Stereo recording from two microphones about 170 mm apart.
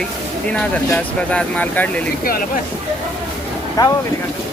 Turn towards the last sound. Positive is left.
turn(degrees=20)  # may be behind; listen again after turning